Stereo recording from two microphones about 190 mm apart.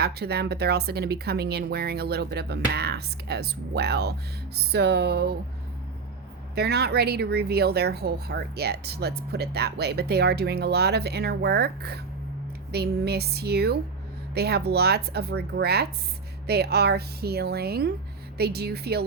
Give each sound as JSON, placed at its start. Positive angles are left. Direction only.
{"t": 0.0, "sound": "speech", "side_deg": -55}
{"t": 6.6, "sound": "speech", "side_deg": -60}